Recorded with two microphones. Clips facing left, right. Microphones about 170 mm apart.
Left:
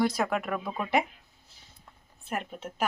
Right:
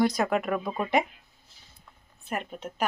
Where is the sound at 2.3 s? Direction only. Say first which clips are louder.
Right 1 dB; 5° left (ahead or behind).